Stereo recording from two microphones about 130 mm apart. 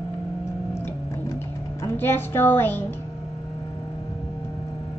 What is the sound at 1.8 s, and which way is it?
A woman's voice, 15° left (ahead or behind).